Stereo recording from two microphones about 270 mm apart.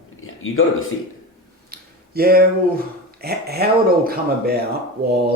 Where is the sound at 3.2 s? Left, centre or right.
Right.